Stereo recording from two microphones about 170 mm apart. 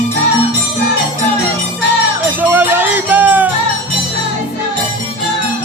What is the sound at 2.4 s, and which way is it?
Music, 10° right (ahead or behind).